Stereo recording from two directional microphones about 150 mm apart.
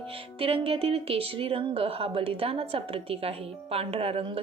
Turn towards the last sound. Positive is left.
turn(degrees=-40)  # may be behind; listen again after turning